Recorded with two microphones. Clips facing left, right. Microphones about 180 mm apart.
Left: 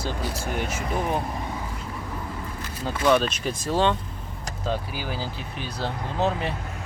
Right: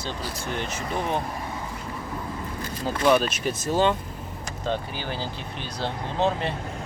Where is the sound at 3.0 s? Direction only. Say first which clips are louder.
Even; 5° right (ahead or behind).